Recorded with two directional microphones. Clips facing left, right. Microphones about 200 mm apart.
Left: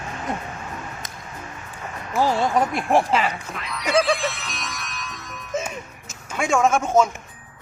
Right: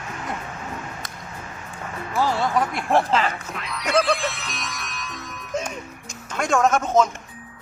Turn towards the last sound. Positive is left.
turn(degrees=10)  # may be behind; listen again after turning